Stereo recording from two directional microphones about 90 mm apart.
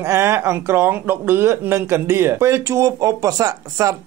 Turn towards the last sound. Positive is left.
turn(degrees=-40)  # may be behind; listen again after turning